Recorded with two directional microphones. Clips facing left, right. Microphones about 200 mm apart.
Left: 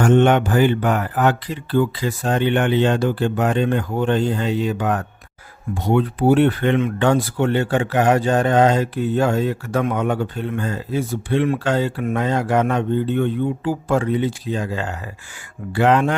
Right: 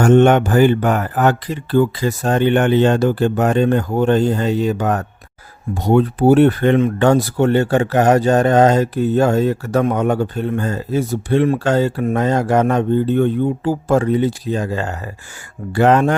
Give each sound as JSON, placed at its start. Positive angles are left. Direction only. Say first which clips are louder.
{"t": 0.0, "sound": "speech", "louder": "right 4 dB", "side_deg": -45}